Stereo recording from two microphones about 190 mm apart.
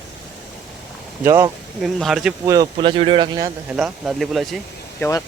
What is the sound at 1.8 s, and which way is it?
Speech, centre (ahead or behind).